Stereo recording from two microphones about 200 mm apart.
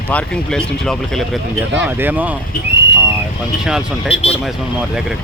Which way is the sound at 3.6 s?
5° right (ahead or behind).